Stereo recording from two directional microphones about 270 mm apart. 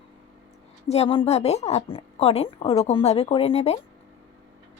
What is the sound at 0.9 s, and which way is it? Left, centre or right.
Speech, left.